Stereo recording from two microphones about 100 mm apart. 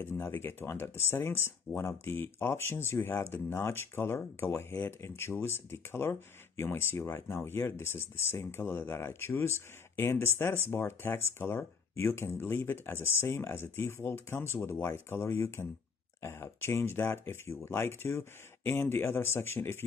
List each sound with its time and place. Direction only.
0.0 s speech: 20° left (ahead or behind)